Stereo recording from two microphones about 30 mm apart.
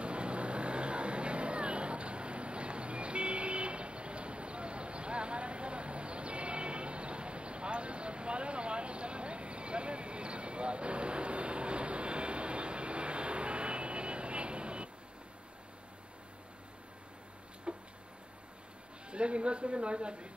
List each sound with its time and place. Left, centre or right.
0.0 s vehicle: right
17.7 s a sound: right
19.0 s a man's voice: right